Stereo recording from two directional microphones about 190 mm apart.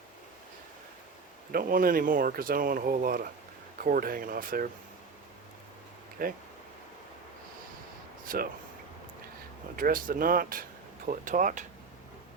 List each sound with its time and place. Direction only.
1.5 s speech: 50° right (ahead or behind)
6.2 s speech: 50° right (ahead or behind)
8.2 s a sound: 50° right (ahead or behind)
9.7 s speech: 50° right (ahead or behind)